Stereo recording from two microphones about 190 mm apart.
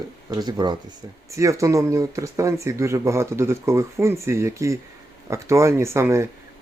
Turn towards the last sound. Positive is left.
turn(degrees=-15)  # may be behind; listen again after turning